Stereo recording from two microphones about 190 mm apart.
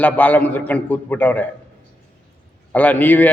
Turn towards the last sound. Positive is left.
turn(degrees=10)  # may be behind; listen again after turning